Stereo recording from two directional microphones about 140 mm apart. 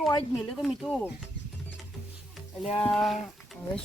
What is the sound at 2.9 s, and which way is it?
Speech, centre (ahead or behind).